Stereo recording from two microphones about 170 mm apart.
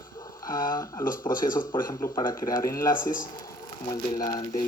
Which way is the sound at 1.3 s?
55° left (ahead or behind).